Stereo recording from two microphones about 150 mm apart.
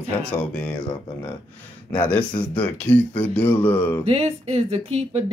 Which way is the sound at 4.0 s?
45° right (ahead or behind).